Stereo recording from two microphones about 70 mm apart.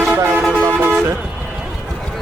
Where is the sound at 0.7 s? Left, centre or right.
Right.